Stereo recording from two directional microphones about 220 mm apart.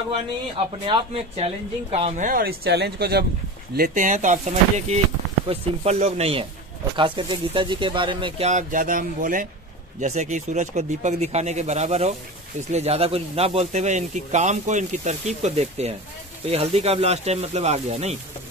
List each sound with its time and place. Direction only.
0.8 s speech: 25° right (ahead or behind)